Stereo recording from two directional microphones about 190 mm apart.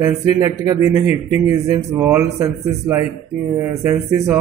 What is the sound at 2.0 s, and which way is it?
Speech, 10° right (ahead or behind).